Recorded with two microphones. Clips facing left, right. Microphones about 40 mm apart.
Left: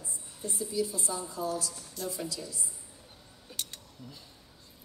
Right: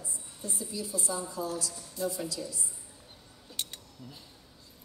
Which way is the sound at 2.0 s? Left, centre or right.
Left.